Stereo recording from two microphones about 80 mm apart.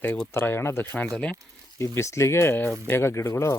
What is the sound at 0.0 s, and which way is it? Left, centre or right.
Speech, left.